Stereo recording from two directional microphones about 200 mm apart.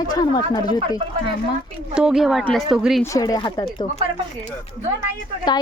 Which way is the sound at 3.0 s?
15° left (ahead or behind).